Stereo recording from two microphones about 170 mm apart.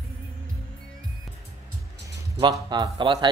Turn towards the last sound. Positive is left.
turn(degrees=-30)  # may be behind; listen again after turning